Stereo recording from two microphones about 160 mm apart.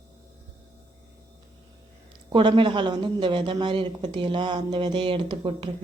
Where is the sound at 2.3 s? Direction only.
30° right (ahead or behind).